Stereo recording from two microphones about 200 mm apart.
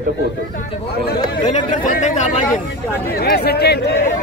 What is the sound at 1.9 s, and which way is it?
Speech, 40° left (ahead or behind).